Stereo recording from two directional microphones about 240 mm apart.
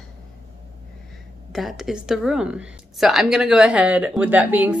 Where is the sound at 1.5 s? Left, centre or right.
Centre.